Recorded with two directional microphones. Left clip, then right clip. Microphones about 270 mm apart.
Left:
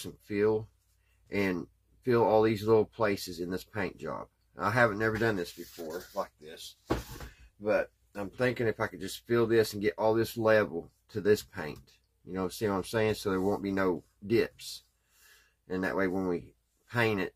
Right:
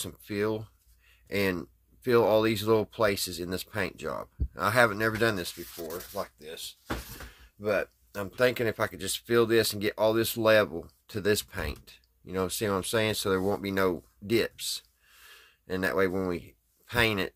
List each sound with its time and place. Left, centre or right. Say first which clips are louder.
0.0 s speech: left 2 dB; right
7.6 s speech: even; right